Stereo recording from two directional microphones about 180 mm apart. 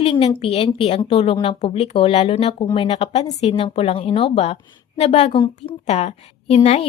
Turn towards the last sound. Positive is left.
turn(degrees=35)  # may be behind; listen again after turning